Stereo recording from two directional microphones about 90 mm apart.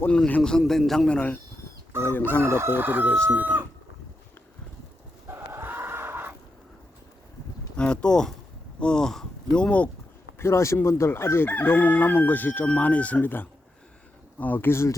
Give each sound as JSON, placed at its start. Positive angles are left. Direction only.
{"t": 0.1, "sound": "speech", "side_deg": 15}
{"t": 0.6, "sound": "a man's voice", "side_deg": 0}
{"t": 2.4, "sound": "chicken", "side_deg": -30}
{"t": 3.1, "sound": "speech", "side_deg": 15}
{"t": 5.3, "sound": "a sound", "side_deg": -25}
{"t": 7.8, "sound": "speech", "side_deg": 10}
{"t": 10.3, "sound": "speech", "side_deg": 30}
{"t": 10.8, "sound": "chicken", "side_deg": 30}